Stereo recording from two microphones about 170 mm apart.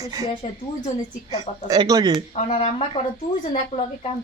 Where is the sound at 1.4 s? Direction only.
20° right (ahead or behind).